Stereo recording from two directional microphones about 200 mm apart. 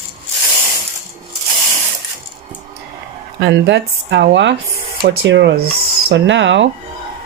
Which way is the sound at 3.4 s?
60° right (ahead or behind).